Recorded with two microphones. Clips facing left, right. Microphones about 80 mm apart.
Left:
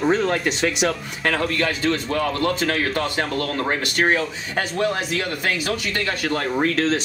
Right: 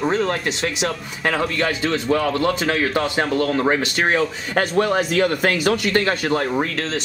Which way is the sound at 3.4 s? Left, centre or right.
Centre.